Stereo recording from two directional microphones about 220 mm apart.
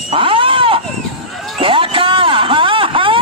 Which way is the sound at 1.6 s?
25° right (ahead or behind).